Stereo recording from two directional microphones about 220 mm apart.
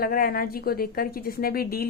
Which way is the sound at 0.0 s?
40° left (ahead or behind).